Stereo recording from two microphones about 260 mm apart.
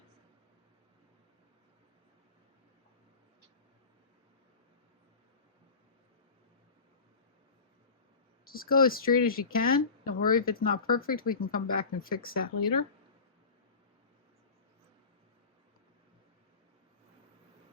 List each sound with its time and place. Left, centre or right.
8.4 s speech: left